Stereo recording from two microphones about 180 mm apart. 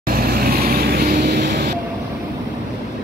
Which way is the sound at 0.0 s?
55° right (ahead or behind).